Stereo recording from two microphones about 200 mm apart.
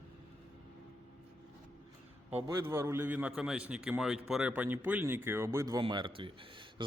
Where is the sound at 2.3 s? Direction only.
30° right (ahead or behind).